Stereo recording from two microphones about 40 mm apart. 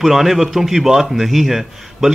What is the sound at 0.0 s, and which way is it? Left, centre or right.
A man's voice, centre.